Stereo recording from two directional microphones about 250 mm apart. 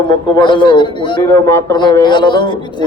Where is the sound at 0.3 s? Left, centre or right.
Centre.